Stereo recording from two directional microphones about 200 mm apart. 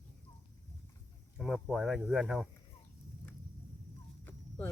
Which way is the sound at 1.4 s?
Centre (ahead or behind).